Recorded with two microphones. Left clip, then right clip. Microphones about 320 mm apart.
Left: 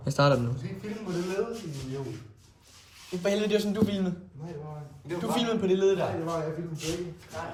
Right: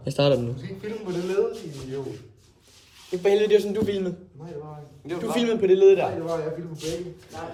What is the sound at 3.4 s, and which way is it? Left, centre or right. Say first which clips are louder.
Speech: right 9 dB; centre.